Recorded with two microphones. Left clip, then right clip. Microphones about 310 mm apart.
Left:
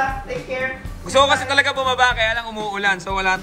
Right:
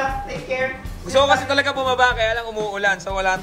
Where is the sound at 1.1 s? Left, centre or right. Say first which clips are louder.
Left 1 dB; centre.